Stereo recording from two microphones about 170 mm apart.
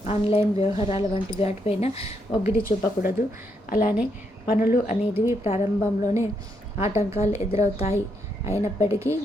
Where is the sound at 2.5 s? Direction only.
60° left (ahead or behind).